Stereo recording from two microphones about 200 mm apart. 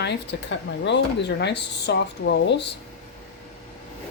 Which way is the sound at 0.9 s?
60° left (ahead or behind).